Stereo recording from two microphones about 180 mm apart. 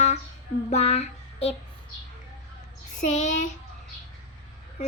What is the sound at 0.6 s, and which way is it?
Child singing, 35° left (ahead or behind).